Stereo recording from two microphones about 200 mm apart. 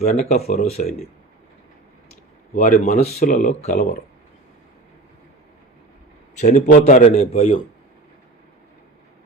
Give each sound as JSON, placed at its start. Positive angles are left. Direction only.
{"t": 0.0, "sound": "speech", "side_deg": 35}
{"t": 2.6, "sound": "speech", "side_deg": 40}
{"t": 6.4, "sound": "speech", "side_deg": 40}